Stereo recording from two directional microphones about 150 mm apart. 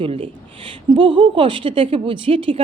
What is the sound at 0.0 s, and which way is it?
A woman's voice, 35° right (ahead or behind).